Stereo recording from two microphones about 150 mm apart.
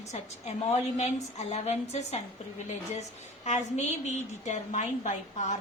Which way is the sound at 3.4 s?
50° left (ahead or behind).